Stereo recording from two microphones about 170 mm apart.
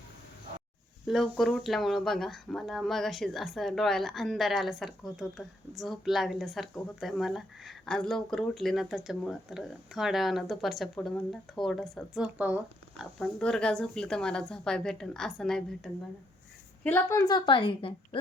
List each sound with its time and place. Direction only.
1.0 s speech: centre (ahead or behind)
13.1 s speech: 5° left (ahead or behind)
16.8 s a woman's voice: 15° left (ahead or behind); by 18.2 s 30° left (ahead or behind)